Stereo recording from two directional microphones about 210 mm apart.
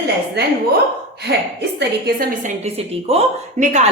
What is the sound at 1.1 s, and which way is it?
Speech, 50° right (ahead or behind).